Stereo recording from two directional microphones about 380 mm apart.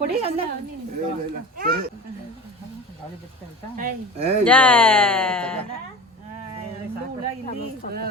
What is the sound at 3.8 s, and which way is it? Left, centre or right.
Speech, centre.